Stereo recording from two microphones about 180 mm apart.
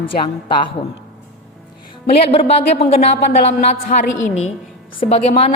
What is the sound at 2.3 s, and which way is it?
Speech, 35° left (ahead or behind).